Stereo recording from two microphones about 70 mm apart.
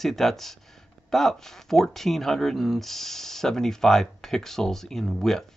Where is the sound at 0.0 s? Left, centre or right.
Centre.